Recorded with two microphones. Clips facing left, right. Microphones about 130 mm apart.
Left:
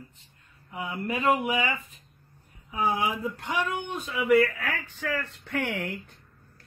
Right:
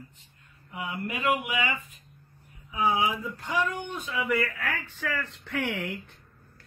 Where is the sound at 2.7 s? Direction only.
55° left (ahead or behind).